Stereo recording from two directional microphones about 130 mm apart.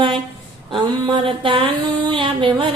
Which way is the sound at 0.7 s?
40° right (ahead or behind).